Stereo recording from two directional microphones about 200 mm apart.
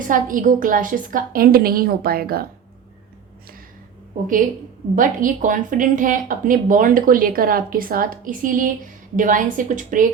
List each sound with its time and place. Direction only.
0.1 s speech: 40° right (ahead or behind)
4.9 s a woman's voice: 40° right (ahead or behind)